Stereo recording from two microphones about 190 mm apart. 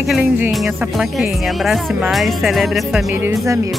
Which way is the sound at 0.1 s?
5° right (ahead or behind).